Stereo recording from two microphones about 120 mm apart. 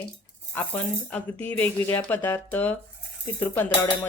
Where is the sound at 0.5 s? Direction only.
15° left (ahead or behind).